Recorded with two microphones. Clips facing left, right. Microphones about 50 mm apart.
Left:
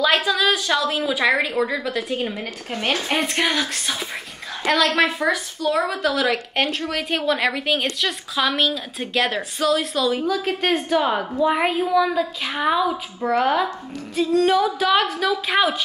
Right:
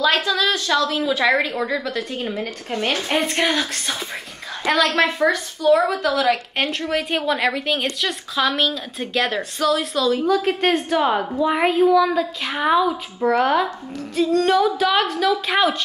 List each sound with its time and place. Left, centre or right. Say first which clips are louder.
0.0 s a woman's voice: even; centre
1.0 s a woman's voice: right 1 dB; centre